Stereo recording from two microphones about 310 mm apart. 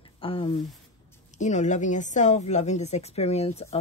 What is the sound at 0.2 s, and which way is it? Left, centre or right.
A woman's voice, centre.